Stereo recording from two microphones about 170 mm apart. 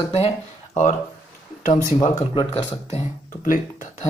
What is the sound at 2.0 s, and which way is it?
Speech, 40° left (ahead or behind).